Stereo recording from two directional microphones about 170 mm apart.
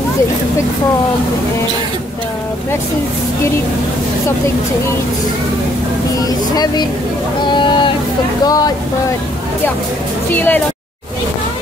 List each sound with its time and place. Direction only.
6.2 s speech: 25° left (ahead or behind)
10.3 s speech: 10° left (ahead or behind)